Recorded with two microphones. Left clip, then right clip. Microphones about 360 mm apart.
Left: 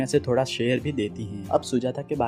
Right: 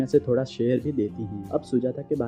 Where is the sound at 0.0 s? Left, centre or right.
Centre.